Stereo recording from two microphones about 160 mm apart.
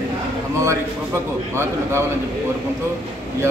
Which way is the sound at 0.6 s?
15° right (ahead or behind).